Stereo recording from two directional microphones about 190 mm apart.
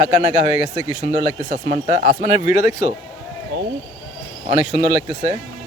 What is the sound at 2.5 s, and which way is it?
Speech, 40° left (ahead or behind).